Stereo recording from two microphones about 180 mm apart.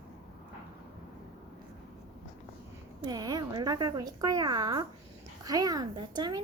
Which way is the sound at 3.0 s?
20° right (ahead or behind).